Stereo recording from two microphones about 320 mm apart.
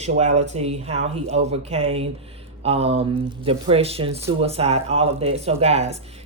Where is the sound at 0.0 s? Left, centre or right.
Right.